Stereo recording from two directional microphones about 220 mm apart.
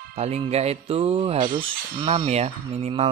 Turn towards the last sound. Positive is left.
turn(degrees=-25)  # may be behind; listen again after turning